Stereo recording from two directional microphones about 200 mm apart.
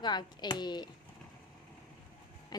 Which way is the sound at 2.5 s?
20° left (ahead or behind).